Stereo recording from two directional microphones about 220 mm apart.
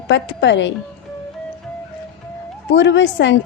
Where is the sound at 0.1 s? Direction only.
55° left (ahead or behind).